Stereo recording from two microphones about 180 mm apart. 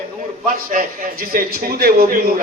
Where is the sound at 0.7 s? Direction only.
50° right (ahead or behind).